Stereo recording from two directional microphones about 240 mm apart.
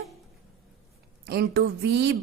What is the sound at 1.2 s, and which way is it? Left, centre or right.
Speech, right.